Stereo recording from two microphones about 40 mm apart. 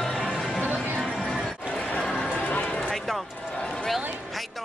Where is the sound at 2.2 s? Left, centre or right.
Left.